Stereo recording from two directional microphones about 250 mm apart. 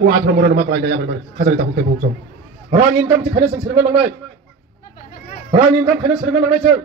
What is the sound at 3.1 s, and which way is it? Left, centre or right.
Speech, right.